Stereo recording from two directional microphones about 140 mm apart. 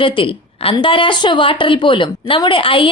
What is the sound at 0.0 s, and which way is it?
A woman's voice, 40° left (ahead or behind).